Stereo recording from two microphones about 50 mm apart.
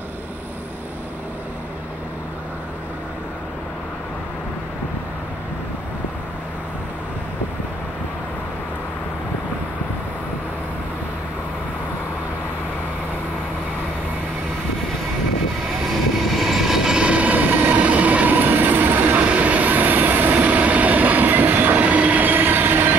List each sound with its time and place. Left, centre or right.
16.3 s train: centre; by 22.9 s right